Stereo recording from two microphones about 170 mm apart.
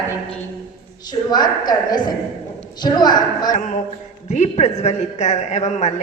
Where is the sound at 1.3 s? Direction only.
25° left (ahead or behind).